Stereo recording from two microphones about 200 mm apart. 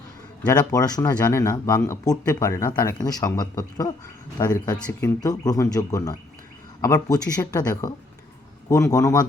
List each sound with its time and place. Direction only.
0.4 s speech: 20° left (ahead or behind)